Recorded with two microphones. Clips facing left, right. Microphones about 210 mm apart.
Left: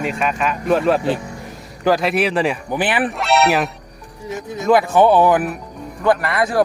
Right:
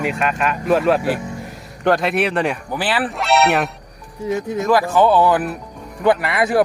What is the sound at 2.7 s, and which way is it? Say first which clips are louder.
Speech: left 2 dB; 15° left (ahead or behind).